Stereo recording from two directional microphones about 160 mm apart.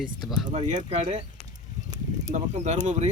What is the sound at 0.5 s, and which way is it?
Speech, 45° right (ahead or behind).